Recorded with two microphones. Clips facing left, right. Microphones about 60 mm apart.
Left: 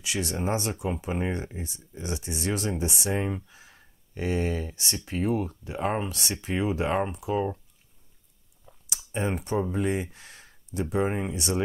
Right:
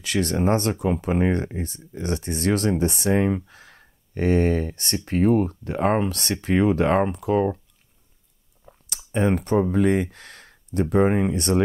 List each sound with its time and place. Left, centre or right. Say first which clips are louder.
0.0 s speech: right 7 dB; right
8.8 s speech: right 7 dB; right